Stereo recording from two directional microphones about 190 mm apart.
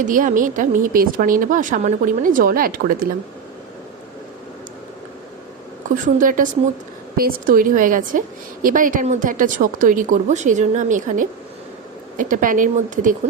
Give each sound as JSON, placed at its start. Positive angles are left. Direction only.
{"t": 0.0, "sound": "a woman's voice", "side_deg": -45}
{"t": 6.1, "sound": "a woman's voice", "side_deg": -45}